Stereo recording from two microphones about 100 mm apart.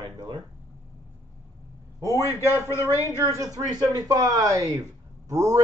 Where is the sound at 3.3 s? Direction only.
35° right (ahead or behind).